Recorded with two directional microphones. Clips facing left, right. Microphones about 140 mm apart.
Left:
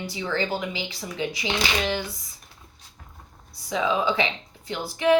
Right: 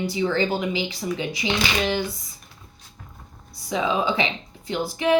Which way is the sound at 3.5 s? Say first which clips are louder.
Right 1 dB; 20° right (ahead or behind).